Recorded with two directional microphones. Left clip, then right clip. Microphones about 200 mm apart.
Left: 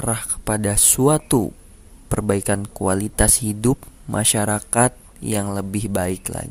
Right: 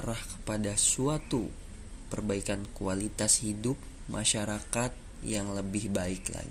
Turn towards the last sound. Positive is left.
turn(degrees=50)  # may be behind; listen again after turning